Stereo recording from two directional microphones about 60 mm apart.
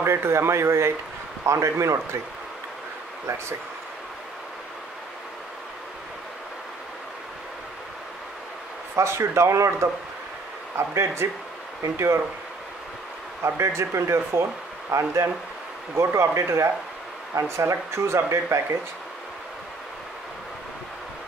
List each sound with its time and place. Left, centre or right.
0.0 s speech: right
8.9 s speech: right
13.4 s speech: right